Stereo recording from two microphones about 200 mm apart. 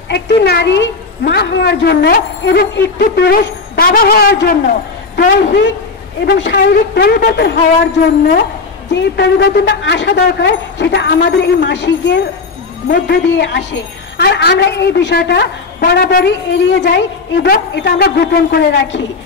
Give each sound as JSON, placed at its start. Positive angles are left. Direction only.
{"t": 0.1, "sound": "a woman's voice", "side_deg": 55}
{"t": 8.9, "sound": "a woman's voice", "side_deg": 60}